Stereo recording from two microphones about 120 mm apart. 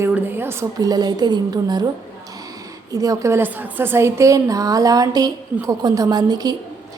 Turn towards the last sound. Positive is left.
turn(degrees=-35)  # may be behind; listen again after turning